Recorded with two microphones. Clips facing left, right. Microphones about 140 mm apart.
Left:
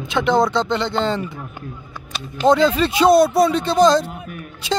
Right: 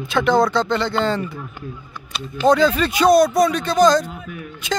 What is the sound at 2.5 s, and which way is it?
Speech, 25° left (ahead or behind).